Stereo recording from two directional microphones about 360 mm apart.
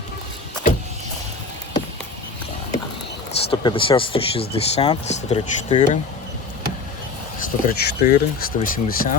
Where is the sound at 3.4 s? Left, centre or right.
Centre.